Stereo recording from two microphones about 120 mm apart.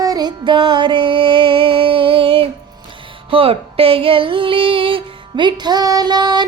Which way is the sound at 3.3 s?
50° right (ahead or behind).